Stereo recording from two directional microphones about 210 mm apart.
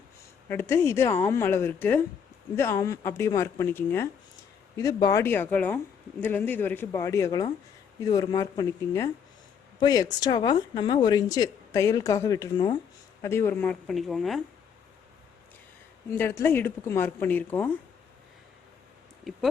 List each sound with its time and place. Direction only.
0.4 s speech: 10° left (ahead or behind)
16.1 s speech: 10° left (ahead or behind)